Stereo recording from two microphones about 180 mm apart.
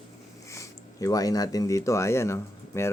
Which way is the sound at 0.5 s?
20° left (ahead or behind).